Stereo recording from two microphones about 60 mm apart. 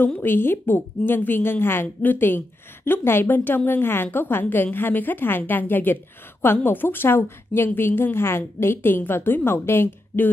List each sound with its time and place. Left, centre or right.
0.2 s a woman's voice: left